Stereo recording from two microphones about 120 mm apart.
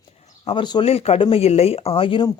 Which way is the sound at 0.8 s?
55° left (ahead or behind).